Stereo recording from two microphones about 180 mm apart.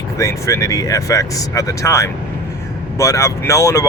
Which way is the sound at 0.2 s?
15° left (ahead or behind).